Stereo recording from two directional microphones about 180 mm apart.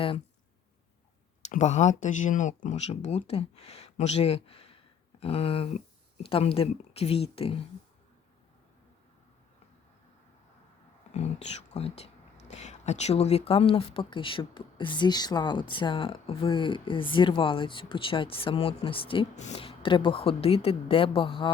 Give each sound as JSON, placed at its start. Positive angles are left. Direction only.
{"t": 1.4, "sound": "speech", "side_deg": 40}
{"t": 11.1, "sound": "speech", "side_deg": 35}